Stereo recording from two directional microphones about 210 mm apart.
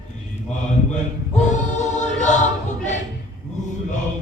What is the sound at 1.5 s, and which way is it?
Choir, 35° left (ahead or behind).